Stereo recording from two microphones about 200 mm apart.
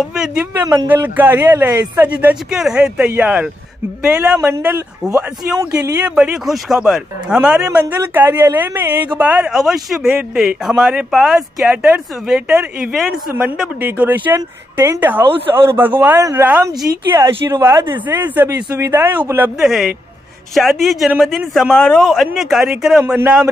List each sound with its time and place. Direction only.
0.0 s speech: centre (ahead or behind)